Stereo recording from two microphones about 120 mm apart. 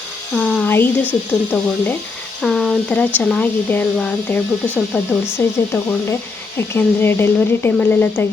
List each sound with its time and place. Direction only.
0.3 s a sound: centre (ahead or behind)
0.7 s speech: 15° left (ahead or behind)
2.4 s speech: centre (ahead or behind)